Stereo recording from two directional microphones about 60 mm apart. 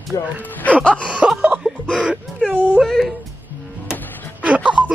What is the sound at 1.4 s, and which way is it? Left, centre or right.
Music, centre.